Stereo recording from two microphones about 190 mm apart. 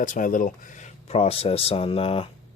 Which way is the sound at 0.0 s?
45° left (ahead or behind).